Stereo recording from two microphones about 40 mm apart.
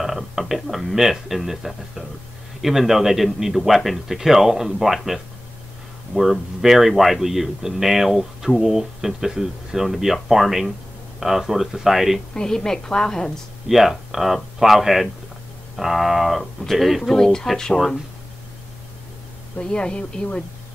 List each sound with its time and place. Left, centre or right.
0.0 s speech: centre
12.4 s a woman's voice: centre
13.7 s a woman's voice: centre
19.5 s speech: left